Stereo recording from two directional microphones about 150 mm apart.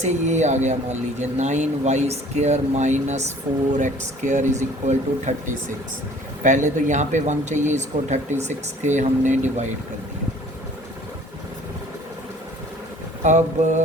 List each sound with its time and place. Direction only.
0.0 s speech: 50° right (ahead or behind)
6.4 s speech: 55° right (ahead or behind)
13.2 s speech: 50° right (ahead or behind)